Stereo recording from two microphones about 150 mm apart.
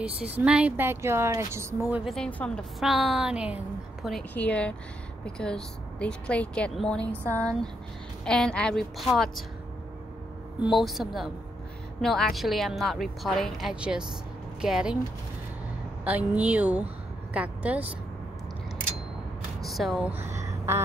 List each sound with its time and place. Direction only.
0.0 s speech: 10° right (ahead or behind)
2.0 s a woman's voice: 5° left (ahead or behind)
4.3 s a woman's voice: 10° left (ahead or behind)
10.6 s a woman's voice: centre (ahead or behind)
16.0 s a woman's voice: 10° right (ahead or behind)
19.6 s a sound: centre (ahead or behind)
20.1 s a sound: 15° right (ahead or behind)